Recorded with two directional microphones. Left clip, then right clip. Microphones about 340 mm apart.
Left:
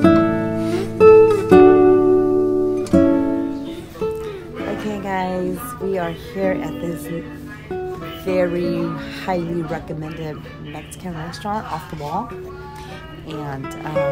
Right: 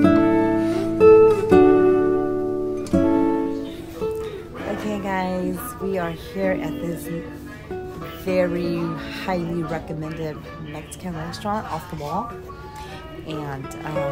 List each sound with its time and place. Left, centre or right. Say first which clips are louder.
0.0 s music: left 1 dB; centre
8.3 s speech: left 2 dB; centre
13.3 s speech: left 2 dB; centre